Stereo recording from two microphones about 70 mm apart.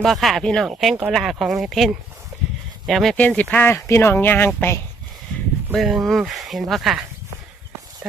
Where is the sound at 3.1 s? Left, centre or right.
Left.